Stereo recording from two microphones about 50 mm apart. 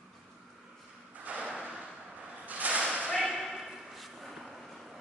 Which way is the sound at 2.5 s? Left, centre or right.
Right.